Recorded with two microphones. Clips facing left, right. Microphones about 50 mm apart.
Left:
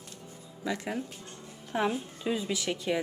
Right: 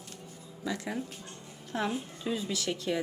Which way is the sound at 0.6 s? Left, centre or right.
Left.